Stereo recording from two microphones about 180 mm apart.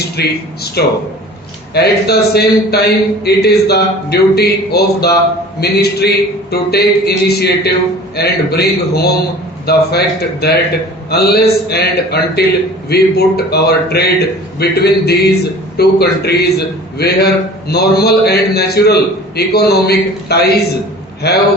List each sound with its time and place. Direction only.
0.0 s a man's voice: 60° left (ahead or behind)